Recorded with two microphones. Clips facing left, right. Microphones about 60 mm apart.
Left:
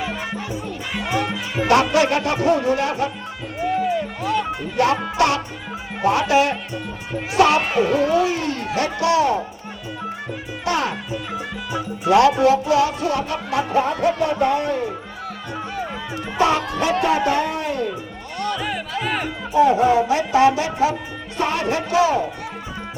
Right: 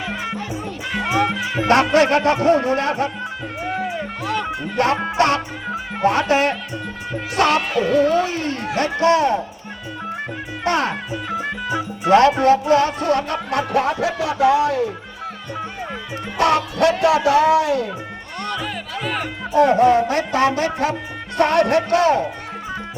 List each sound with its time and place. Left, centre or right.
1.6 s speech: right
3.8 s music: right
5.1 s speech: right
6.0 s music: right
7.6 s speech: left
8.0 s speech: right
10.6 s speech: right
11.7 s music: right
17.0 s speech: right
18.5 s music: centre
19.5 s music: right
21.3 s speech: right